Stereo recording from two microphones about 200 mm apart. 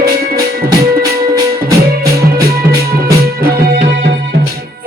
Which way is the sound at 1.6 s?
50° right (ahead or behind).